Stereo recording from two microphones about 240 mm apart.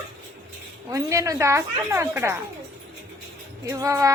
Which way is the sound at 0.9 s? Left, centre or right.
Centre.